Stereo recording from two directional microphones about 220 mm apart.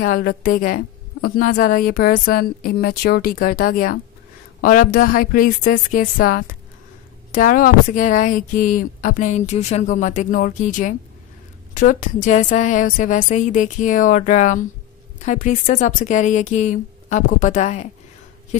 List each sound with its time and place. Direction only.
0.0 s a woman's voice: 40° left (ahead or behind)